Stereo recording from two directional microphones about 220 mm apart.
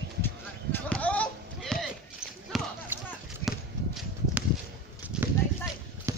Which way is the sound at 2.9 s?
10° right (ahead or behind).